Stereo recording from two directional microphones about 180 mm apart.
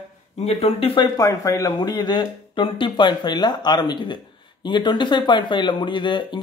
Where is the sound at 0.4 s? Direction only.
35° left (ahead or behind).